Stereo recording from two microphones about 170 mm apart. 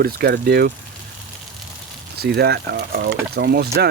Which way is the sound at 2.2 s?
70° right (ahead or behind).